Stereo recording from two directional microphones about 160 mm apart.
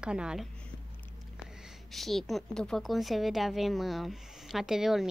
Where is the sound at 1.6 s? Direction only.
Centre (ahead or behind).